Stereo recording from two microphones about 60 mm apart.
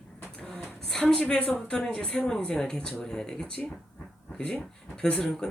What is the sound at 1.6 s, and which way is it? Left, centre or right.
Speech, centre.